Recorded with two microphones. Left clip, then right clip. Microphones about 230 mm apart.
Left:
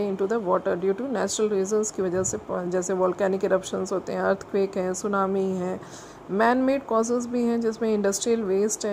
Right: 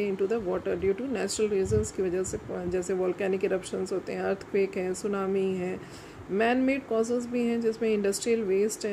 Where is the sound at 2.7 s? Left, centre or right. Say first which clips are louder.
Left 4 dB; left.